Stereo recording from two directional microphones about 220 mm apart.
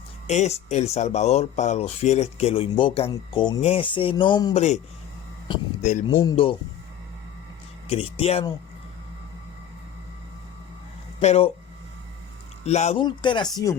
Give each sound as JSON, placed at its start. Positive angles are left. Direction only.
{"t": 0.3, "sound": "speech", "side_deg": 30}
{"t": 5.8, "sound": "speech", "side_deg": 35}
{"t": 7.9, "sound": "speech", "side_deg": 25}
{"t": 11.2, "sound": "speech", "side_deg": 30}
{"t": 12.6, "sound": "speech", "side_deg": 30}